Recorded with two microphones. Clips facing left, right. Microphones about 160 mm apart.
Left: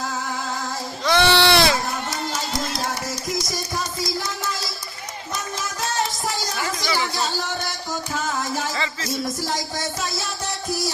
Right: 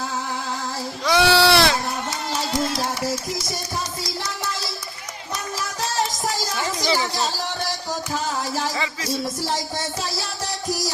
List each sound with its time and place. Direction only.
1.0 s sheep: 5° right (ahead or behind)
6.3 s music: 35° right (ahead or behind)
8.7 s music: 10° right (ahead or behind)
9.4 s music: 30° right (ahead or behind)